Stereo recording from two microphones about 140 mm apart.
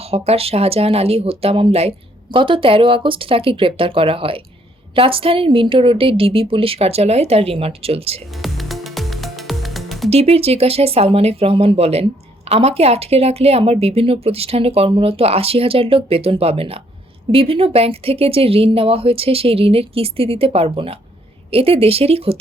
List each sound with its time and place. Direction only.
0.1 s speech: 45° right (ahead or behind)
8.4 s music: centre (ahead or behind)
10.1 s speech: 45° right (ahead or behind)